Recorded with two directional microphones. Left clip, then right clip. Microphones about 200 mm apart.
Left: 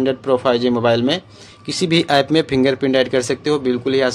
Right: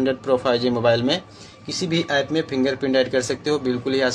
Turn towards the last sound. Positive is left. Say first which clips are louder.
# left 4 dB
turn(degrees=25)  # may be behind; listen again after turning